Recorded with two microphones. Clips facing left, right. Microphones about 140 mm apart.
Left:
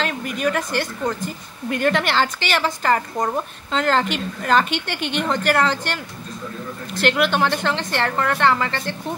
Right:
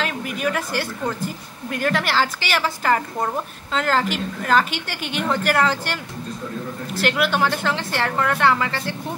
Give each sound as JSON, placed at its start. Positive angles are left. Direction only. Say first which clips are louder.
{"t": 0.0, "sound": "a woman's voice", "louder": "left 2 dB", "side_deg": -5}